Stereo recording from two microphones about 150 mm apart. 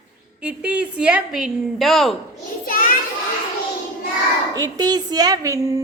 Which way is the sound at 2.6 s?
65° left (ahead or behind).